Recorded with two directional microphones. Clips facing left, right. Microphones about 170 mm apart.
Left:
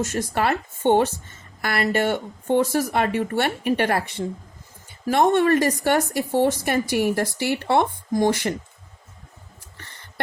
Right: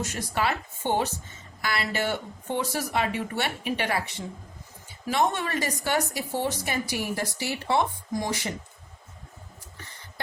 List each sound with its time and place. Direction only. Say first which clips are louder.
0.0 s a woman's voice: left 5 dB; 50° left (ahead or behind)